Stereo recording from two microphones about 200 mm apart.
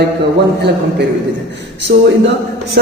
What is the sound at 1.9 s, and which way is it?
Speech, 40° right (ahead or behind).